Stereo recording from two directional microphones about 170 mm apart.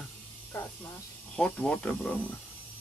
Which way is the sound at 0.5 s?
15° left (ahead or behind).